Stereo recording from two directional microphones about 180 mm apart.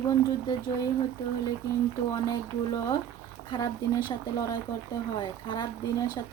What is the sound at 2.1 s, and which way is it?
Speech, 20° left (ahead or behind).